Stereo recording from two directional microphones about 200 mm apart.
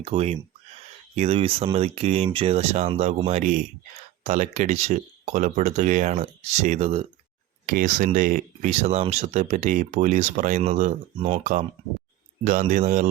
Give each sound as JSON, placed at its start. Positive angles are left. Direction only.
{"t": 0.0, "sound": "speech", "side_deg": -30}